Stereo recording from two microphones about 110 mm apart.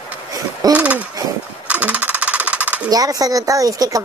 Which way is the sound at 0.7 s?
10° right (ahead or behind).